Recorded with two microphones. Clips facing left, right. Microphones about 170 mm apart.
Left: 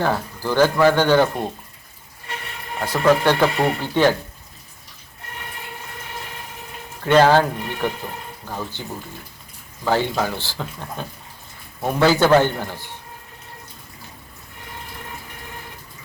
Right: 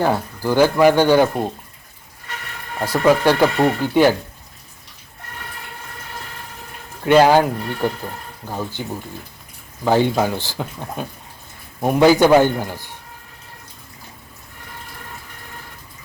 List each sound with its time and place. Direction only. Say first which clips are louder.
0.0 s speech: right 3 dB; 10° right (ahead or behind)
2.8 s speech: right 2 dB; 10° right (ahead or behind)
7.0 s speech: right 2 dB; 10° right (ahead or behind)